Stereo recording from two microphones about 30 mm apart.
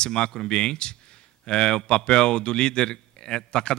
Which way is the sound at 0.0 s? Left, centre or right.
Left.